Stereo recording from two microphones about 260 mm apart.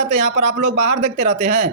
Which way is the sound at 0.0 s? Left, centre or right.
Right.